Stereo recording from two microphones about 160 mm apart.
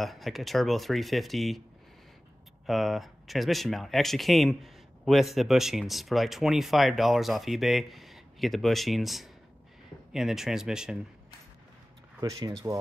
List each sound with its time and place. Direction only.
0.0 s speech: centre (ahead or behind)
2.6 s speech: centre (ahead or behind)
12.2 s speech: 25° right (ahead or behind)